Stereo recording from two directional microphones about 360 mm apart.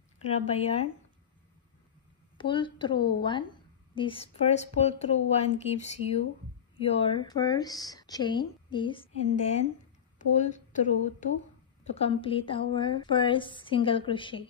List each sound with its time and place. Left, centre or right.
0.2 s speech: centre
2.3 s speech: centre